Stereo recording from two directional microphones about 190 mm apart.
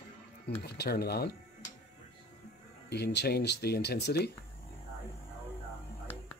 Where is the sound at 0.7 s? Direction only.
55° left (ahead or behind).